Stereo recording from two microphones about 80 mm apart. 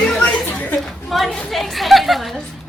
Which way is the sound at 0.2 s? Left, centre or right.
Left.